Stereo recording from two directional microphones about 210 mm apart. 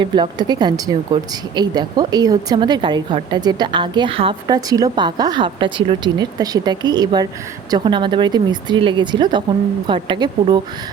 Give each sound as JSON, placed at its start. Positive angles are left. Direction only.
{"t": 0.0, "sound": "speech", "side_deg": -20}